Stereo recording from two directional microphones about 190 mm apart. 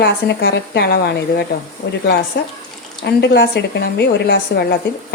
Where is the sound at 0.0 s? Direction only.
60° left (ahead or behind).